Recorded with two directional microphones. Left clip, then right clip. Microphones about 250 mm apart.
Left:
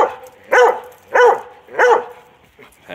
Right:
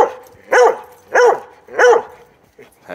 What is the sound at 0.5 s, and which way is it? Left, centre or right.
Dog, right.